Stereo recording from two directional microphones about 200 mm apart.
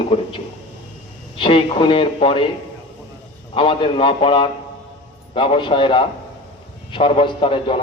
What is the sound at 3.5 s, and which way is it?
A man's voice, 25° left (ahead or behind).